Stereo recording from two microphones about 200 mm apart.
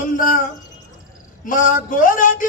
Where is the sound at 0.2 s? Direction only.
40° left (ahead or behind).